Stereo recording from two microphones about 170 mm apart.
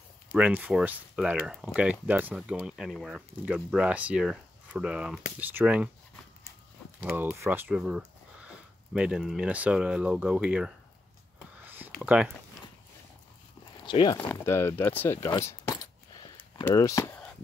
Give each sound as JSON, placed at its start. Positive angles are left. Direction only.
{"t": 0.4, "sound": "speech", "side_deg": -5}
{"t": 7.1, "sound": "speech", "side_deg": -15}
{"t": 11.6, "sound": "a sound", "side_deg": -10}
{"t": 12.0, "sound": "speech", "side_deg": -5}
{"t": 13.8, "sound": "speech", "side_deg": 25}
{"t": 14.4, "sound": "coin", "side_deg": 15}
{"t": 16.7, "sound": "speech", "side_deg": 20}